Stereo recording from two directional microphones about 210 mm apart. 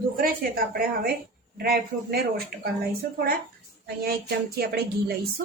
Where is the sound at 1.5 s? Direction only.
45° right (ahead or behind).